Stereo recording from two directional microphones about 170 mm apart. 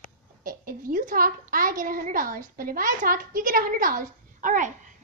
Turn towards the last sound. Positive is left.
turn(degrees=-50)  # may be behind; listen again after turning